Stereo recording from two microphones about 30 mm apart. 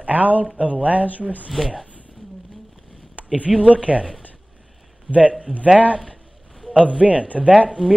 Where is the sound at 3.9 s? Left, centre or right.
Right.